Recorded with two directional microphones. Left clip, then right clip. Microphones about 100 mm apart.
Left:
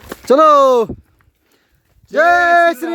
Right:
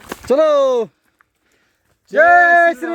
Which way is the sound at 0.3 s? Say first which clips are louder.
Left 4 dB; 80° left.